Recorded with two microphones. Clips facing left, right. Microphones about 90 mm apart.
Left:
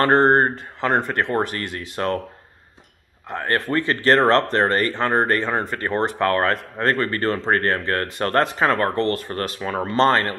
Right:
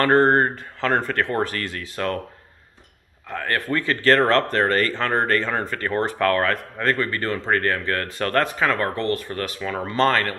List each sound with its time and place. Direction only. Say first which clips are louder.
0.0 s speech: left 1 dB; 25° left (ahead or behind)
3.3 s speech: left 2 dB; 25° left (ahead or behind)